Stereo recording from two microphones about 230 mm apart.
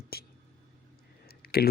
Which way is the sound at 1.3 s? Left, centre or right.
Left.